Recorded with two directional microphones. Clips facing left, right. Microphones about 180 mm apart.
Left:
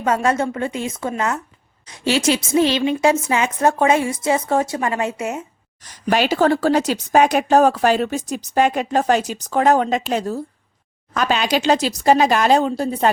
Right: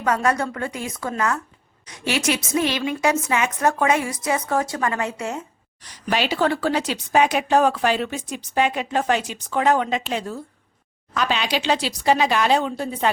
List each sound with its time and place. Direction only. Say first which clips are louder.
0.0 s a woman's voice: left 3 dB; 25° left (ahead or behind)
5.8 s a woman's voice: left 5 dB; 45° left (ahead or behind)